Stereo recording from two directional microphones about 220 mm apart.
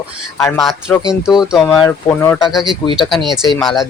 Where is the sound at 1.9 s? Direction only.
10° left (ahead or behind).